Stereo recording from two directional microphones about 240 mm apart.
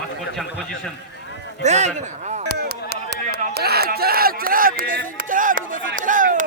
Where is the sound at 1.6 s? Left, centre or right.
Right.